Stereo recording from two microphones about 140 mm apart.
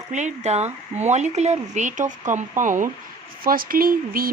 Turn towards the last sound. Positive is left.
turn(degrees=-90)